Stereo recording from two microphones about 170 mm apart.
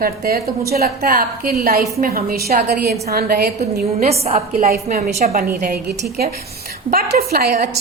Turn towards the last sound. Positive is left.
turn(degrees=-65)  # may be behind; listen again after turning